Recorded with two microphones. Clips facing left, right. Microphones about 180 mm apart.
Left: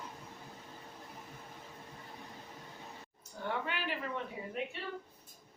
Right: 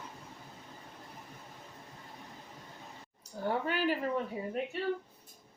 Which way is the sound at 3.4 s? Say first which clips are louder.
Right 6 dB; 40° right (ahead or behind).